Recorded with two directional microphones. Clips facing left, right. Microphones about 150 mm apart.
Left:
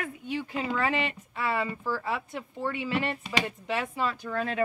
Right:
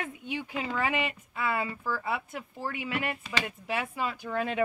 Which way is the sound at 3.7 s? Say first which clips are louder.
Left 2 dB; 5° right (ahead or behind).